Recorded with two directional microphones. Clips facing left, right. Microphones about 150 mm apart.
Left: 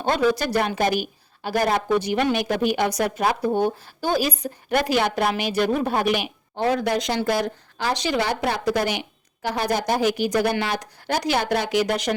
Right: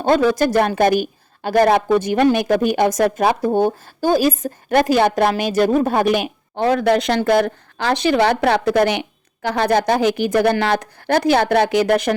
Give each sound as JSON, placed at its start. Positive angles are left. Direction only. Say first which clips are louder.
{"t": 0.0, "sound": "a woman's voice", "louder": "right 6 dB", "side_deg": -45}
{"t": 6.6, "sound": "speech", "louder": "right 6 dB", "side_deg": -70}
{"t": 7.2, "sound": "speech", "louder": "right 7 dB", "side_deg": -55}
{"t": 9.6, "sound": "speech", "louder": "right 6 dB", "side_deg": -75}
{"t": 10.2, "sound": "speech", "louder": "right 5 dB", "side_deg": -55}